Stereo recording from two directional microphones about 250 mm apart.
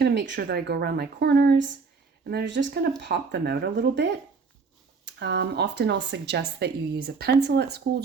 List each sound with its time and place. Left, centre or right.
0.0 s speech: right
5.0 s speech: right